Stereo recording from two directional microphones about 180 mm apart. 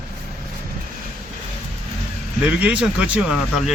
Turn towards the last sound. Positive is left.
turn(degrees=-5)  # may be behind; listen again after turning